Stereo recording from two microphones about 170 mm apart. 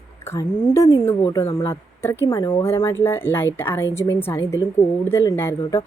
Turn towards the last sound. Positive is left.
turn(degrees=15)  # may be behind; listen again after turning